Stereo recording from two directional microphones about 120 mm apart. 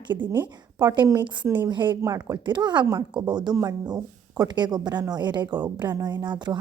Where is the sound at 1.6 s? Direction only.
40° right (ahead or behind).